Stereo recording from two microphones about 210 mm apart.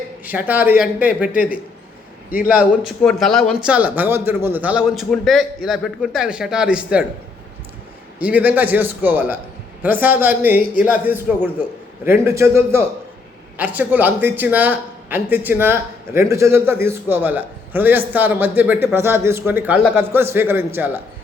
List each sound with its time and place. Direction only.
0.3 s speech: 10° right (ahead or behind)
1.3 s a man's voice: 40° left (ahead or behind)
2.5 s speech: 5° right (ahead or behind)
8.2 s speech: 5° right (ahead or behind)